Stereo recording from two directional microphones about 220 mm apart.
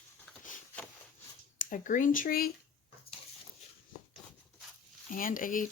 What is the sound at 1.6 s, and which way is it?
Speech, 35° left (ahead or behind).